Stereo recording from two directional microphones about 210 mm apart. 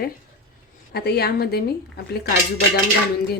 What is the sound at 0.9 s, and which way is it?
Speech, 50° left (ahead or behind).